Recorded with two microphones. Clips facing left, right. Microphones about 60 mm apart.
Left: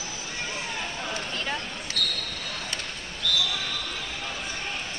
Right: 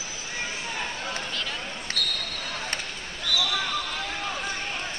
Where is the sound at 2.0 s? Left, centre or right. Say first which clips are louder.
Left 1 dB; centre.